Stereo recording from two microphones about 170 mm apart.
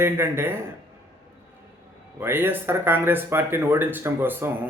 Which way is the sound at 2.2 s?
15° right (ahead or behind).